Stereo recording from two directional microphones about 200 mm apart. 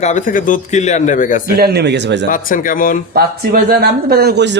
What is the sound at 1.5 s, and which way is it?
Speech, 50° right (ahead or behind).